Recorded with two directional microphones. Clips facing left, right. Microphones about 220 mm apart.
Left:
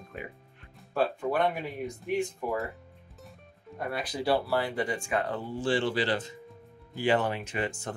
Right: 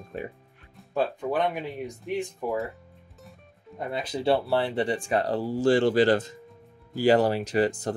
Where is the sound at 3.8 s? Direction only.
20° right (ahead or behind).